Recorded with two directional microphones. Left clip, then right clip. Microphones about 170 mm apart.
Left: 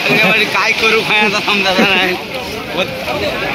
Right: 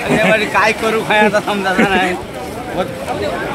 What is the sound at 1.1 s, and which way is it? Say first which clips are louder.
Speech: even; 55° right (ahead or behind).